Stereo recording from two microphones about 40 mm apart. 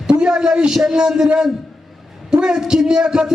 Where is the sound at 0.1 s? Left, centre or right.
Centre.